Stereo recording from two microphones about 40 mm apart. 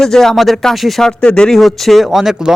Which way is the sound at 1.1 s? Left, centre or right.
Left.